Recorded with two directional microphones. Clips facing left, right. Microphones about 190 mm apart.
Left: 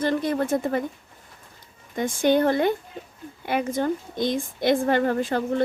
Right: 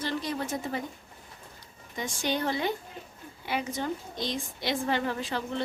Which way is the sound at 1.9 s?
55° left (ahead or behind).